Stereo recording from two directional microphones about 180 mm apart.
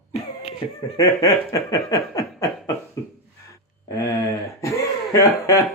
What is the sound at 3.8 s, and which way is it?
Speech, 15° left (ahead or behind).